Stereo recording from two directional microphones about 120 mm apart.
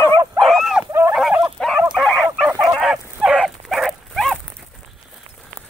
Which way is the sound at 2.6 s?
5° right (ahead or behind).